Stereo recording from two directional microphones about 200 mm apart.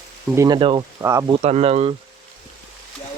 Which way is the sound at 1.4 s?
30° right (ahead or behind).